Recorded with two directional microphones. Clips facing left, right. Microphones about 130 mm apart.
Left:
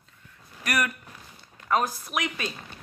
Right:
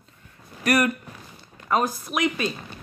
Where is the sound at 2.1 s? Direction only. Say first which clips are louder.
Right 6 dB; 30° right (ahead or behind).